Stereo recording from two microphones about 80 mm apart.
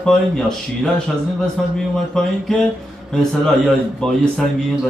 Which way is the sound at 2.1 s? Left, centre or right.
Centre.